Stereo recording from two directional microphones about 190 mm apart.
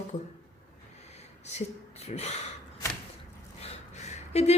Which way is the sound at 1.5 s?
35° left (ahead or behind).